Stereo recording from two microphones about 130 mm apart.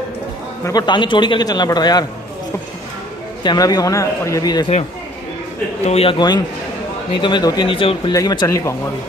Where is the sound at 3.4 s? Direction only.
30° left (ahead or behind).